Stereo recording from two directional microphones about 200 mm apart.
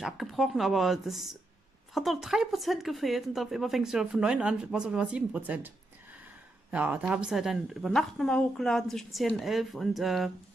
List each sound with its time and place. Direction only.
0.0 s speech: centre (ahead or behind)
6.7 s speech: 5° right (ahead or behind)